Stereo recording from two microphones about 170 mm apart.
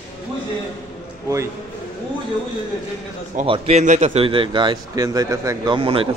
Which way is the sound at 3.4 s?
35° right (ahead or behind).